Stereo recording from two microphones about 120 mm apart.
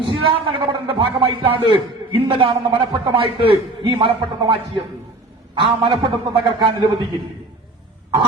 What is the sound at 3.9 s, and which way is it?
Speech, 45° right (ahead or behind).